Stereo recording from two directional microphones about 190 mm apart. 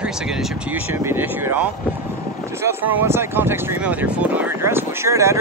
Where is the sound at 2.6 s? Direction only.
10° right (ahead or behind).